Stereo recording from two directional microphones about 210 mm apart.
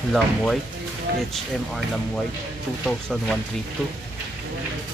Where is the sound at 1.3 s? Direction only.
Centre (ahead or behind).